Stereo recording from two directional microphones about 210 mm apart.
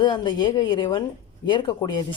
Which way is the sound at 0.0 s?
20° left (ahead or behind).